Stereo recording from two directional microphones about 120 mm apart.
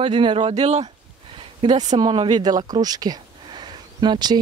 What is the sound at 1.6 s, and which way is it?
Speech, 35° right (ahead or behind).